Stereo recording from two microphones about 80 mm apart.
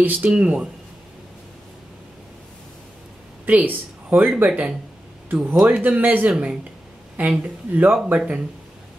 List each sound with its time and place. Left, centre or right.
0.0 s speech: centre
3.4 s speech: right